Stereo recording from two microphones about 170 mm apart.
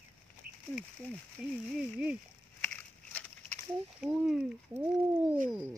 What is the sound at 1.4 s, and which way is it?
Speech, 5° right (ahead or behind).